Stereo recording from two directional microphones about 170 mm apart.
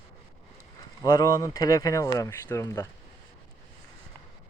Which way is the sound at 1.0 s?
20° left (ahead or behind).